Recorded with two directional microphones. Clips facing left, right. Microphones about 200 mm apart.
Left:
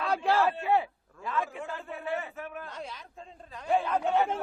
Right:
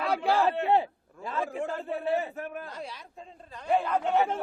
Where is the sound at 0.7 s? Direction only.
30° right (ahead or behind).